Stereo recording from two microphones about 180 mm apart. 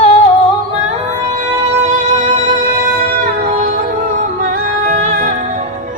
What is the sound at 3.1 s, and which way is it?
Music, 55° right (ahead or behind).